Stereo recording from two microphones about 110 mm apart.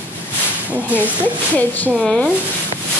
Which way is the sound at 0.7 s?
15° right (ahead or behind).